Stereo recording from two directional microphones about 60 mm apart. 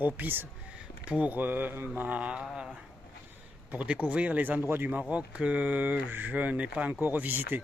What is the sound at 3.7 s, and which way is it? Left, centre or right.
Speech, right.